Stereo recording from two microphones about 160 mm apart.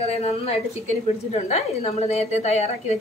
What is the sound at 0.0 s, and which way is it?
A woman's voice, 40° left (ahead or behind).